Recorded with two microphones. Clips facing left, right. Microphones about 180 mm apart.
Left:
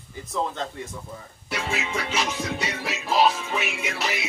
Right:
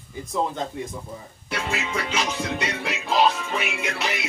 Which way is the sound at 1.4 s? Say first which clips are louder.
Right 1 dB; centre (ahead or behind).